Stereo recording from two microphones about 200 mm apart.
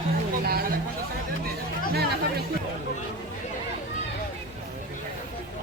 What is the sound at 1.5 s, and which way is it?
Chatter, 50° right (ahead or behind).